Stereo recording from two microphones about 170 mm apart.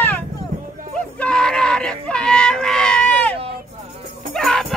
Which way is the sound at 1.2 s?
5° left (ahead or behind).